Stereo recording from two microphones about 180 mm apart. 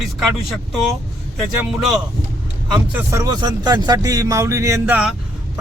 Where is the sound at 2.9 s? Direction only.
15° right (ahead or behind).